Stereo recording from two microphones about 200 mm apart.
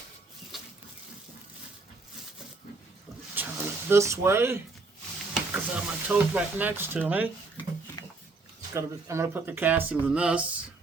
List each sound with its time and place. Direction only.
0.5 s water tap: centre (ahead or behind)
3.3 s vehicle: 10° right (ahead or behind)
5.3 s speech: 5° right (ahead or behind)
8.7 s speech: 15° right (ahead or behind)